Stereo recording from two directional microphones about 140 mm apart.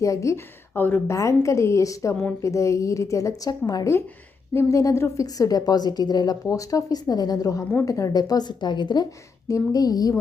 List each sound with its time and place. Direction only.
0.0 s a woman's voice: 20° left (ahead or behind)